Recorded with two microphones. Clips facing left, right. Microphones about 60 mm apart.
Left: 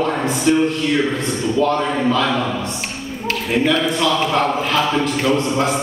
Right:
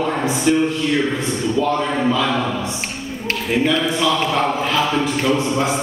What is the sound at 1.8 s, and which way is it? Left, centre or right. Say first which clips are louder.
A man's voice: left 1 dB; centre.